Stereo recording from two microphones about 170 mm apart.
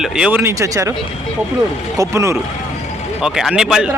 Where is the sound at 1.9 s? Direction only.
20° right (ahead or behind).